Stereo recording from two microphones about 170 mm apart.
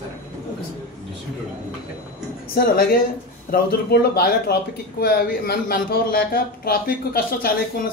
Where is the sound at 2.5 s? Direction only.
65° left (ahead or behind).